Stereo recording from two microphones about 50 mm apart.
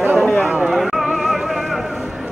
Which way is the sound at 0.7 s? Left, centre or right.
Centre.